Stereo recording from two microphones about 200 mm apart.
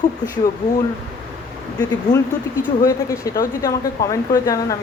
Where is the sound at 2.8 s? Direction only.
15° left (ahead or behind).